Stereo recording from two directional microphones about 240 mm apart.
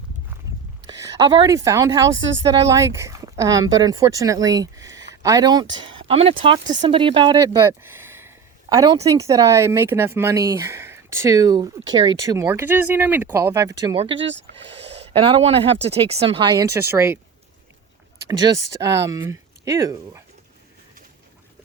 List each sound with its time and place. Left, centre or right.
0.9 s a woman's voice: centre
2.1 s speech: right
2.6 s a woman's voice: centre
14.2 s speech: right
14.8 s speech: right; by 17.2 s centre
18.3 s speech: centre